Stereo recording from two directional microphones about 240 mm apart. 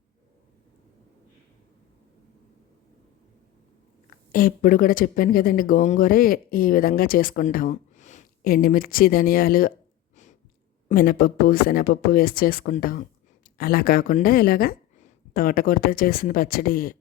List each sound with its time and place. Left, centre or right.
4.3 s speech: left
10.8 s speech: left